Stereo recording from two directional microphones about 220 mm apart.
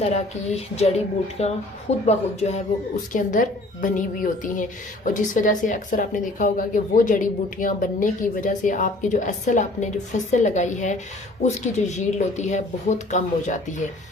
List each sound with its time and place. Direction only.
0.0 s a woman's voice: 30° left (ahead or behind)